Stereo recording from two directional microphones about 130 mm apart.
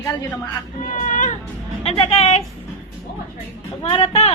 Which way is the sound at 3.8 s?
50° left (ahead or behind).